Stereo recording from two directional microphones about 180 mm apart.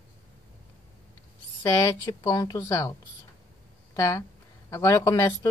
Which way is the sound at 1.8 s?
20° left (ahead or behind).